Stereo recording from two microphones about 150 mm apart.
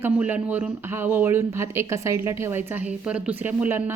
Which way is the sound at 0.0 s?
10° right (ahead or behind).